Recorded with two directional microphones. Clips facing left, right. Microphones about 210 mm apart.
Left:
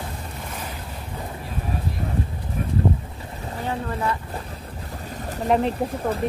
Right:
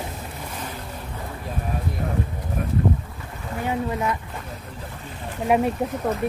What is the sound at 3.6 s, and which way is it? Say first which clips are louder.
Speech: right 2 dB; 15° right (ahead or behind).